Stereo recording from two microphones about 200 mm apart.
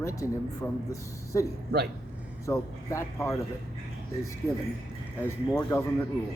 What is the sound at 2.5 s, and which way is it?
Speech, 15° left (ahead or behind).